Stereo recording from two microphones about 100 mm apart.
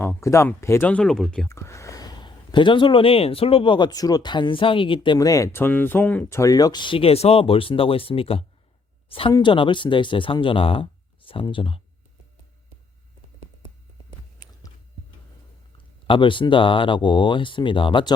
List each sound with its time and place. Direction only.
0.0 s speech: 25° left (ahead or behind)
0.9 s speech: 10° left (ahead or behind)
1.5 s speech: 30° left (ahead or behind); by 5.1 s 60° left (ahead or behind)
5.1 s speech: 35° left (ahead or behind); by 6.2 s 15° left (ahead or behind)
6.2 s speech: 30° left (ahead or behind); by 9.3 s 65° left (ahead or behind)
9.4 s speech: 55° left (ahead or behind)
16.0 s speech: 55° left (ahead or behind)